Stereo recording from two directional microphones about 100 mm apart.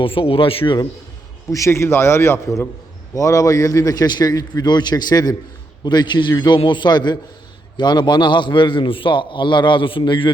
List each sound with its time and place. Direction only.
0.0 s speech: 60° left (ahead or behind)
1.5 s a man's voice: 30° left (ahead or behind); by 10.3 s 55° left (ahead or behind)